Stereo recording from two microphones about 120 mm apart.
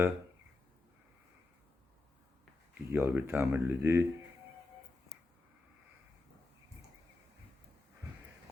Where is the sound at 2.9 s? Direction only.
20° right (ahead or behind).